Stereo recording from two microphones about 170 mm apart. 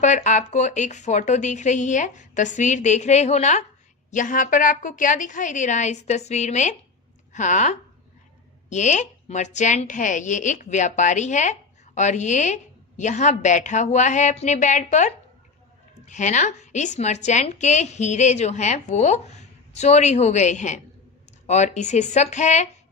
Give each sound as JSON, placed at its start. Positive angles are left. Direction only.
{"t": 0.0, "sound": "a woman's voice", "side_deg": 45}